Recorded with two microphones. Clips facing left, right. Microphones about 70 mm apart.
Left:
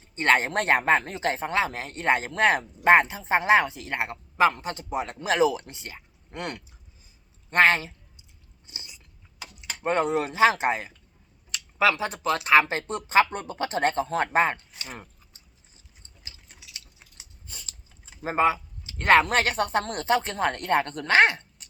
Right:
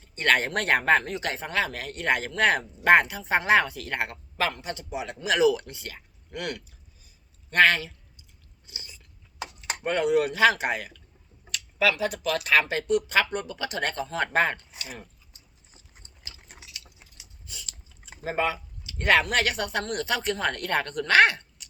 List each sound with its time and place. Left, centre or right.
0.0 s a man's voice: left
8.6 s biting: left
9.8 s speech: left
14.3 s speech: left
14.8 s speech: left
17.2 s biting: left
18.2 s a sound: left
18.9 s speech: left